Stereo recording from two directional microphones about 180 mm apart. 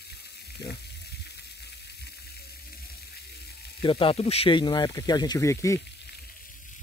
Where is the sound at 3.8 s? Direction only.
30° left (ahead or behind).